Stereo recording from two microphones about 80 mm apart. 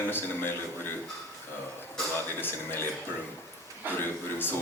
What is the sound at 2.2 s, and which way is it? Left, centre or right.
Speech, left.